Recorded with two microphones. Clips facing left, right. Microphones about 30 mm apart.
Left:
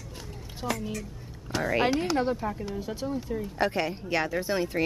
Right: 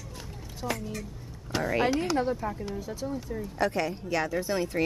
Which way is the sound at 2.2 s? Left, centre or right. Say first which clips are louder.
Left 1 dB; left.